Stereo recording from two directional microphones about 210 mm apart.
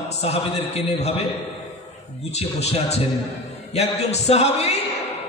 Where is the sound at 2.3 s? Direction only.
30° left (ahead or behind).